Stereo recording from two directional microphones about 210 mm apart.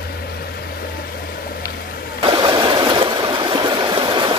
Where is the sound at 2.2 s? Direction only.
20° right (ahead or behind).